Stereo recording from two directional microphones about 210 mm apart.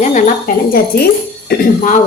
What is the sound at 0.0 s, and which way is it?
A woman's voice, 35° left (ahead or behind).